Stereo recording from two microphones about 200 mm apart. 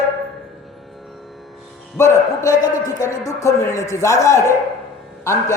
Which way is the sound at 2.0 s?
15° left (ahead or behind).